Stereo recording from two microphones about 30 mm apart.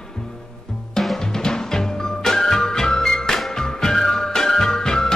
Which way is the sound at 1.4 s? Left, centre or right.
Left.